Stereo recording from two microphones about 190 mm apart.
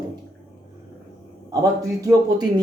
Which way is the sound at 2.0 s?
20° right (ahead or behind).